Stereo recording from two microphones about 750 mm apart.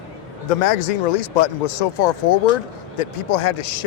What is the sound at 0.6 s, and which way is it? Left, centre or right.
Speech, left.